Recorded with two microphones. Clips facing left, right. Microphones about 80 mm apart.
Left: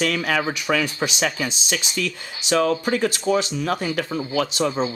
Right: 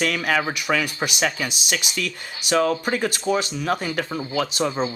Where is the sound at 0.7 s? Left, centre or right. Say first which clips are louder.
Left 1 dB; centre.